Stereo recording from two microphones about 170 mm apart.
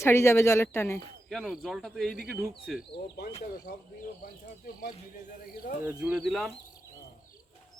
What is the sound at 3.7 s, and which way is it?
Speech, 70° left (ahead or behind).